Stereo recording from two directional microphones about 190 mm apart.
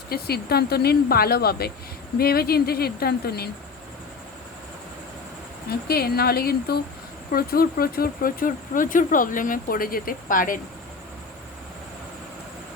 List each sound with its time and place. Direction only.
0.1 s speech: 55° left (ahead or behind)
5.9 s speech: 55° left (ahead or behind)